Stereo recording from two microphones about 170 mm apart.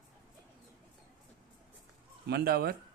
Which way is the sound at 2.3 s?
65° right (ahead or behind).